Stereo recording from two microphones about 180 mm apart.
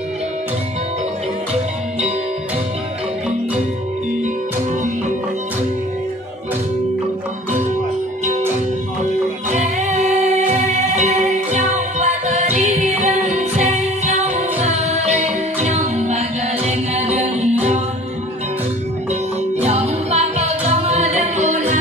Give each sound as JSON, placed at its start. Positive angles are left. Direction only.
{"t": 9.5, "sound": "music", "side_deg": -40}
{"t": 19.6, "sound": "music", "side_deg": -35}